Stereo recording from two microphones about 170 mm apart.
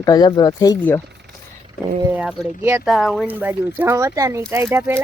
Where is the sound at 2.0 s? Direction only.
10° right (ahead or behind).